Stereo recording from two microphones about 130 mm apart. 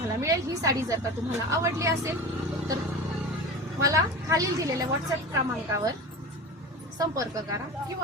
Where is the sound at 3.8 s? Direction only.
25° right (ahead or behind).